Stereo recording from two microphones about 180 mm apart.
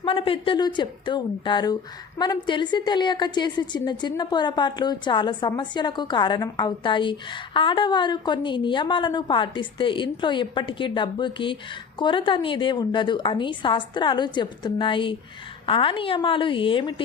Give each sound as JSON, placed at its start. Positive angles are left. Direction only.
{"t": 0.0, "sound": "a woman's voice", "side_deg": 30}